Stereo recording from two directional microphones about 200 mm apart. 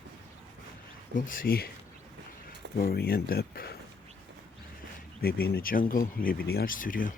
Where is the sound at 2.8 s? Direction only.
50° left (ahead or behind).